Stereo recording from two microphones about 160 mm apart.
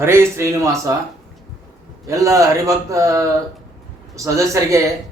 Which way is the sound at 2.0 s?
20° right (ahead or behind).